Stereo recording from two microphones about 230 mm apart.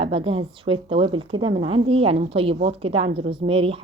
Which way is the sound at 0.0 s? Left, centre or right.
Right.